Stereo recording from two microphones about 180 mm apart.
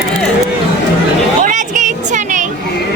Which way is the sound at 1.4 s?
45° right (ahead or behind).